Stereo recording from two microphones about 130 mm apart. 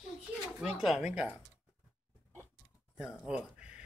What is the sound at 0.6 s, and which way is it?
Speech, centre (ahead or behind).